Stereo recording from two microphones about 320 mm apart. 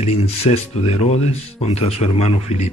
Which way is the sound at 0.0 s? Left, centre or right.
Centre.